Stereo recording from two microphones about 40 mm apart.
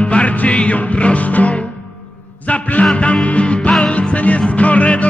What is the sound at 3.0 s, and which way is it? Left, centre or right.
Music, left.